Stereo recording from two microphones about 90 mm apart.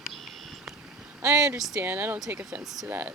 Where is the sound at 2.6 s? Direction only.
Centre (ahead or behind).